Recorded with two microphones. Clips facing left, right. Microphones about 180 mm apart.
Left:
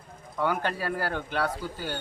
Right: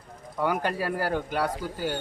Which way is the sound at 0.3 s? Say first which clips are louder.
Right 1 dB; 10° right (ahead or behind).